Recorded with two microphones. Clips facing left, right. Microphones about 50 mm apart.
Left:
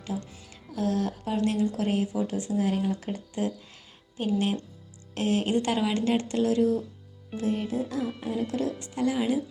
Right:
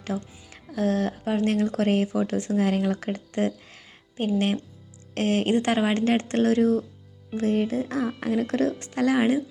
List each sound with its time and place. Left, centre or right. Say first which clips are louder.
0.5 s speech: right 3 dB; right
1.5 s speech: right 4 dB; right
4.2 s a woman's voice: right 3 dB; right